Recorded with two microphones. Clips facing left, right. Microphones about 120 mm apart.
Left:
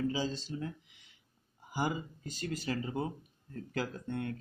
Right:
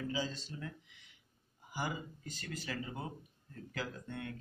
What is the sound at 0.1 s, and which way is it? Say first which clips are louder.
Speech: left 4 dB; 30° left (ahead or behind).